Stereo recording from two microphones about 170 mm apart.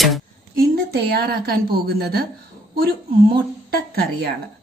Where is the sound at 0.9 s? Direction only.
70° right (ahead or behind).